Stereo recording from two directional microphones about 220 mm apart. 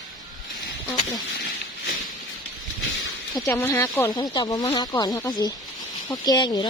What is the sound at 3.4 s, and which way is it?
Speech, 15° left (ahead or behind).